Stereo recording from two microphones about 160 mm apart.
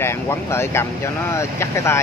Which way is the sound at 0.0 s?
15° left (ahead or behind).